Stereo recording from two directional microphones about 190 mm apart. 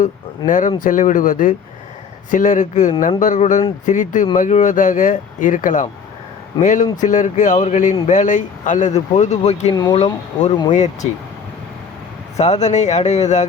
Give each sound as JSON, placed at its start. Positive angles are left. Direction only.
{"t": 0.0, "sound": "speech", "side_deg": 45}
{"t": 12.4, "sound": "speech", "side_deg": 35}